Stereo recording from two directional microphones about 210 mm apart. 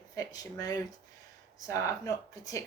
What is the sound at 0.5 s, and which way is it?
Speech, 15° left (ahead or behind).